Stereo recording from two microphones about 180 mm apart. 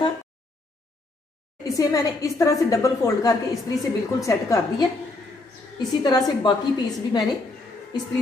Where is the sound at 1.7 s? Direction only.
20° left (ahead or behind).